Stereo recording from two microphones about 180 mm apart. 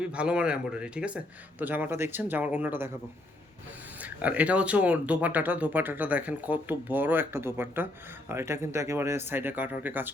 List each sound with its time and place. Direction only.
0.0 s speech: 5° right (ahead or behind)
4.0 s speech: 10° right (ahead or behind)